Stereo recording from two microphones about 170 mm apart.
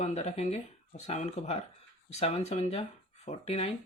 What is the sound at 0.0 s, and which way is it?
Speech, 40° left (ahead or behind).